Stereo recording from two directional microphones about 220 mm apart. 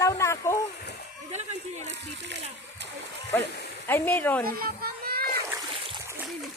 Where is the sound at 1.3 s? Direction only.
30° right (ahead or behind).